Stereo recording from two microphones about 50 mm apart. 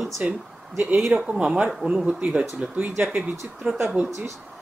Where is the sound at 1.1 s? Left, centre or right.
Right.